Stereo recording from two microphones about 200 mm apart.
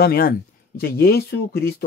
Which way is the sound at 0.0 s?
50° left (ahead or behind).